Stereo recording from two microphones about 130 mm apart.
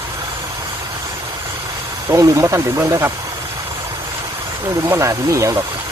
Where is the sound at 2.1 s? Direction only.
25° right (ahead or behind).